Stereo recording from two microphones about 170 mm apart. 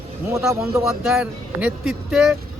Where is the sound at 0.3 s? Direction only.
15° right (ahead or behind).